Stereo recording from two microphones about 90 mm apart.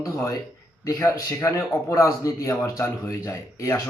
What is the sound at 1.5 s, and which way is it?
A man's voice, 35° left (ahead or behind).